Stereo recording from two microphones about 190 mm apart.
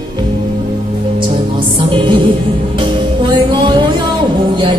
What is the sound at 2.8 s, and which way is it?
Music, 25° right (ahead or behind).